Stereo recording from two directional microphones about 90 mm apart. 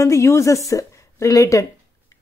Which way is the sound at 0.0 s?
35° left (ahead or behind).